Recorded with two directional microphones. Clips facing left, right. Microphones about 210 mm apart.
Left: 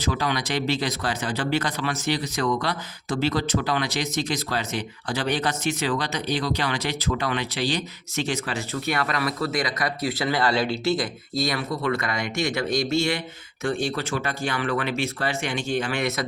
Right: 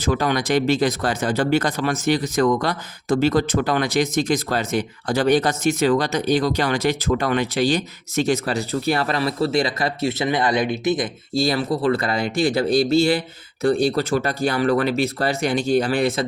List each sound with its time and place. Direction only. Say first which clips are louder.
0.0 s speech: right 5 dB; 50° right (ahead or behind); by 16.2 s 30° right (ahead or behind)